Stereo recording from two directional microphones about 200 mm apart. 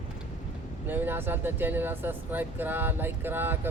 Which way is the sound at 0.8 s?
10° right (ahead or behind).